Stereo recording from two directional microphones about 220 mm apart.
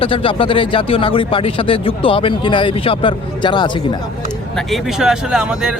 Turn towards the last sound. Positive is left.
turn(degrees=-5)  # may be behind; listen again after turning